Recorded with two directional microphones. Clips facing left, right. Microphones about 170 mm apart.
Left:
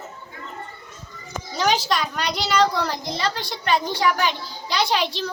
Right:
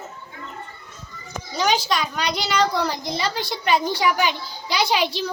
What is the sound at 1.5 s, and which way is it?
A child's voice, centre (ahead or behind).